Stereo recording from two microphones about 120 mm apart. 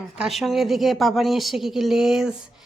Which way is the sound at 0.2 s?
Centre (ahead or behind).